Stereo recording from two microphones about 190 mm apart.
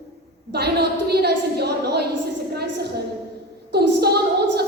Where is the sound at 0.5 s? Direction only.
60° right (ahead or behind).